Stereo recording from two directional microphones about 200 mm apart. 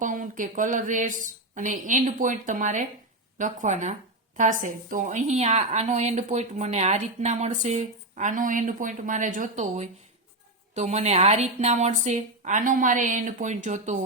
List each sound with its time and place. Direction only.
0.0 s a woman's voice: 40° right (ahead or behind)